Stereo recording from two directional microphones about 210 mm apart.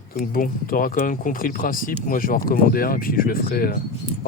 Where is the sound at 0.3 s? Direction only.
40° left (ahead or behind).